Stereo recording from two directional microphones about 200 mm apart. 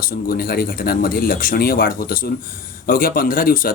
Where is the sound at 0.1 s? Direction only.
45° left (ahead or behind).